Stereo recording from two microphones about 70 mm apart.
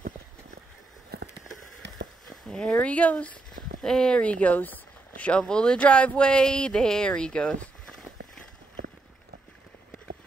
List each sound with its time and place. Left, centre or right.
2.5 s speech: centre
3.8 s speech: centre